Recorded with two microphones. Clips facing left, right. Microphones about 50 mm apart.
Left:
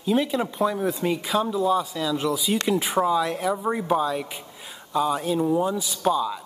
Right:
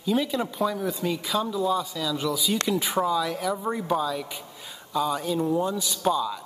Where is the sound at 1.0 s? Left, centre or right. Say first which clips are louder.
Left 2 dB; left; by 3.0 s centre.